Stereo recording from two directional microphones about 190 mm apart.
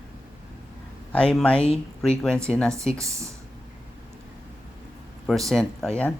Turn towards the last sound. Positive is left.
turn(degrees=5)  # may be behind; listen again after turning